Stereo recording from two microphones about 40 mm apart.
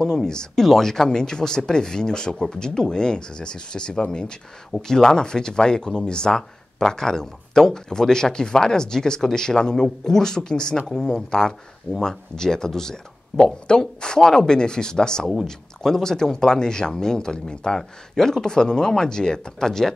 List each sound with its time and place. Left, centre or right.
0.0 s speech: centre